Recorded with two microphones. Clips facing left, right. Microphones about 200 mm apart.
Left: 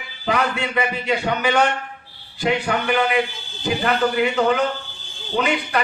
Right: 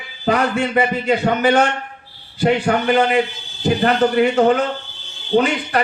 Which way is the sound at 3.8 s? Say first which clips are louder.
Right 4 dB; 40° right (ahead or behind).